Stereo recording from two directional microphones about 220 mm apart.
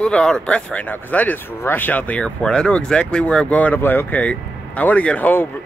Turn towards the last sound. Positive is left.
turn(degrees=5)  # may be behind; listen again after turning